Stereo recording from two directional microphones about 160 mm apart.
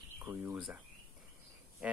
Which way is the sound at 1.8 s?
5° right (ahead or behind).